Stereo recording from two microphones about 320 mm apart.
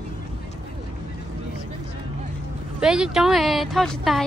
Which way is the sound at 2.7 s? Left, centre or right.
Centre.